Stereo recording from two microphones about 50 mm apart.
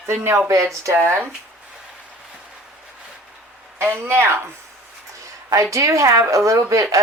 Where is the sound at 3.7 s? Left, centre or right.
Right.